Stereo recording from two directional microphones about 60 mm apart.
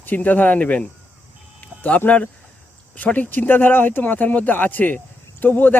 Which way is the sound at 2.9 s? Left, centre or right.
Left.